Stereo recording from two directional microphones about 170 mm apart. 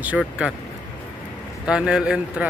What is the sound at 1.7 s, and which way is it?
Speech, 5° right (ahead or behind).